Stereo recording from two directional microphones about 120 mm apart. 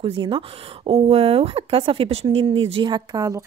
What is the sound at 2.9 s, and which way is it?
Speech, 30° right (ahead or behind).